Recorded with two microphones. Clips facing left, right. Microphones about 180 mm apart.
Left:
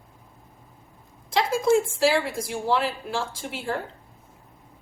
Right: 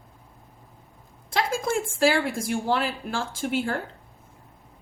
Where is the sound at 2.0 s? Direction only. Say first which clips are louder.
Even; 50° right (ahead or behind).